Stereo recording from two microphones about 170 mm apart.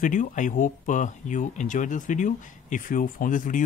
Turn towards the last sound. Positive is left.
turn(degrees=50)  # may be behind; listen again after turning